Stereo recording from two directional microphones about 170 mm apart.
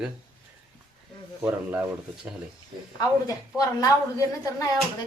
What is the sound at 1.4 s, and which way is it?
Speech, 10° right (ahead or behind).